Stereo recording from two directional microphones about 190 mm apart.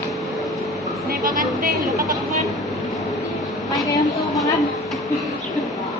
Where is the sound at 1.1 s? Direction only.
45° right (ahead or behind).